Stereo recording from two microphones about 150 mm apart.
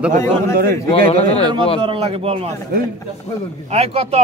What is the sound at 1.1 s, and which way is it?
Speech, 40° left (ahead or behind).